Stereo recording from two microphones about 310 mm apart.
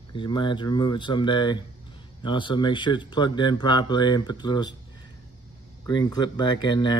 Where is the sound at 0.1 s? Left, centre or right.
Centre.